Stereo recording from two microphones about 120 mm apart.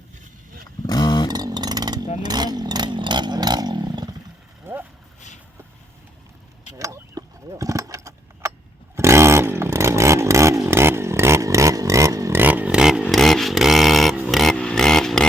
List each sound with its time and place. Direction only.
0.9 s dog: 35° left (ahead or behind)
1.3 s a sound: 35° right (ahead or behind)
2.2 s chainsaw: 35° right (ahead or behind)
4.6 s vehicle: 15° right (ahead or behind)
6.7 s keys jangling: 25° right (ahead or behind)
9.0 s chainsaw: 20° right (ahead or behind)
12.4 s chainsaw: 15° right (ahead or behind)
14.3 s a sound: centre (ahead or behind)